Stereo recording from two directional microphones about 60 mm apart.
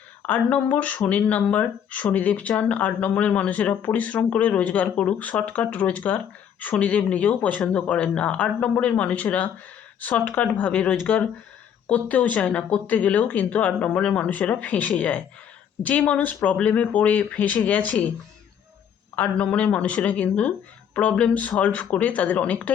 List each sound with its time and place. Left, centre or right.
0.3 s speech: left
19.1 s speech: left